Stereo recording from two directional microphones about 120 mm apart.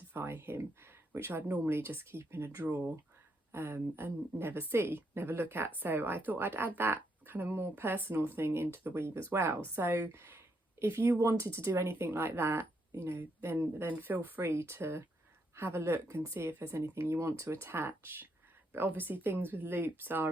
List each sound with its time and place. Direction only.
0.1 s a woman's voice: 20° right (ahead or behind)